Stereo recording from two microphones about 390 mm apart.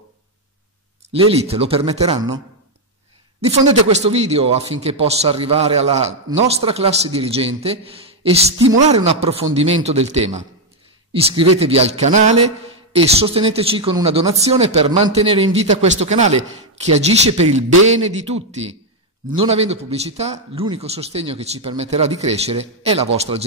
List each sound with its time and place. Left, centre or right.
1.4 s a man's voice: centre
3.3 s a man's voice: centre